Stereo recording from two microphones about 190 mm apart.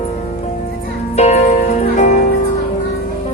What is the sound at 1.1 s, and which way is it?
Music, 35° left (ahead or behind).